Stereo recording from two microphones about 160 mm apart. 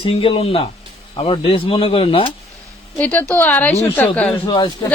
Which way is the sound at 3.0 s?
10° left (ahead or behind).